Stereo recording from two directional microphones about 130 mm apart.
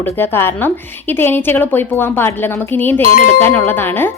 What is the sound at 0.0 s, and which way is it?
A woman's voice, 15° left (ahead or behind).